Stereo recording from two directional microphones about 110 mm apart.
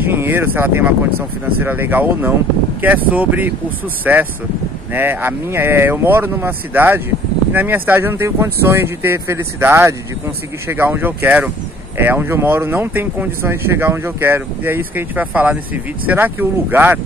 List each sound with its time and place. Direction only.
0.0 s speech: 20° right (ahead or behind)